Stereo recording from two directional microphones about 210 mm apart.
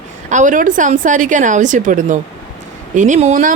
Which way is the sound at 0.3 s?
35° right (ahead or behind).